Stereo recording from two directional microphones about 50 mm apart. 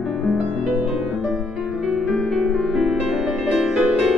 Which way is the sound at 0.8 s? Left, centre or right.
Centre.